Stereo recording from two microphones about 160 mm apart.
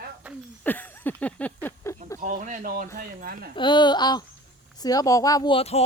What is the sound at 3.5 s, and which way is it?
Speech, 30° left (ahead or behind).